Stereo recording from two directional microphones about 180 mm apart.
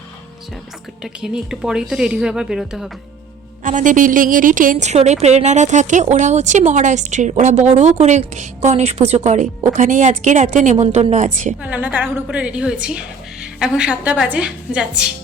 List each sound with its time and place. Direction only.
1.0 s speech: 5° right (ahead or behind)
3.6 s a woman's voice: 45° right (ahead or behind)
11.6 s a woman's voice: 10° right (ahead or behind)